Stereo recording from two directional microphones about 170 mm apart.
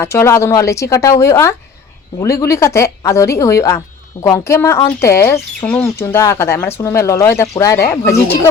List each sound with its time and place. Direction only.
0.0 s speech: 15° left (ahead or behind)